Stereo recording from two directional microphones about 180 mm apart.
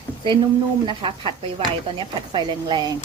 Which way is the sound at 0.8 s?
30° right (ahead or behind).